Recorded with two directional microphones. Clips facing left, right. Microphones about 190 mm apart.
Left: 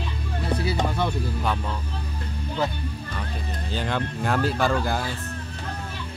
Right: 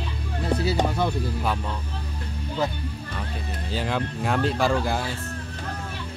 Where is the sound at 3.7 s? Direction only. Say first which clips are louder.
Right 1 dB; 5° right (ahead or behind).